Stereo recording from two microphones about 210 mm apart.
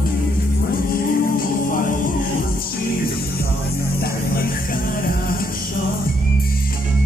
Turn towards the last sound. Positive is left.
turn(degrees=45)  # may be behind; listen again after turning